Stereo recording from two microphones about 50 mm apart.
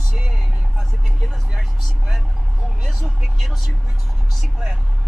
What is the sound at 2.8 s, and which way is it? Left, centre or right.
Speech, centre.